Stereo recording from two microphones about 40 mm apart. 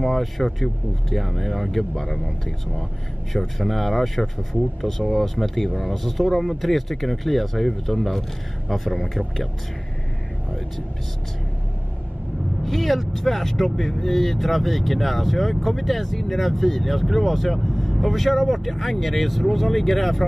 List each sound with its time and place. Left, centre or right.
0.0 s speech: centre
3.3 s speech: centre
4.8 s speech: centre
5.2 s speech: centre
12.6 s speech: centre